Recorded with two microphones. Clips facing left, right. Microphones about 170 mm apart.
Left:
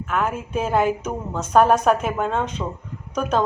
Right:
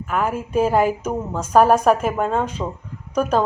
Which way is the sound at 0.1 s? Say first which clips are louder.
Right 2 dB; 5° right (ahead or behind).